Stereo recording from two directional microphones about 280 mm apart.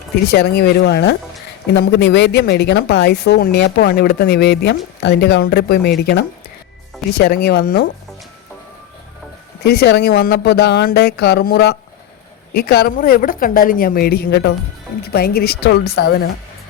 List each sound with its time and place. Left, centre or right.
0.3 s speech: left
9.6 s speech: left